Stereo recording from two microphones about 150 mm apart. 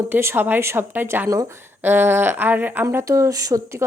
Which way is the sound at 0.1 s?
15° right (ahead or behind).